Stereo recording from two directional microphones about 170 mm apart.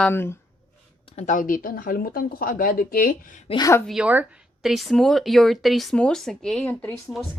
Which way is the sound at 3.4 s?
25° left (ahead or behind).